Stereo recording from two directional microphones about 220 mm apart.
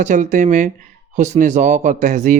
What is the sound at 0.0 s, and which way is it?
Speech, 35° right (ahead or behind).